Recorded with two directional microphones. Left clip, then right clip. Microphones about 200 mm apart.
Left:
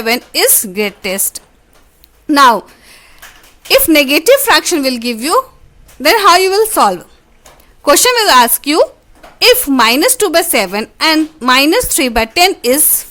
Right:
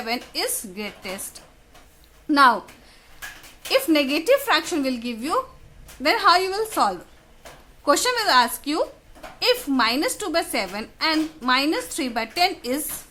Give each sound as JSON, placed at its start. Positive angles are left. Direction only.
{"t": 0.0, "sound": "a woman's voice", "side_deg": 50}
{"t": 2.2, "sound": "a sound", "side_deg": 50}
{"t": 3.7, "sound": "a woman's voice", "side_deg": 50}